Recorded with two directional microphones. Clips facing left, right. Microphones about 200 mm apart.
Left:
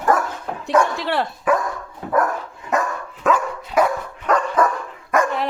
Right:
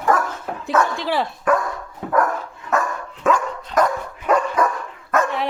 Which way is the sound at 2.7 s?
20° left (ahead or behind).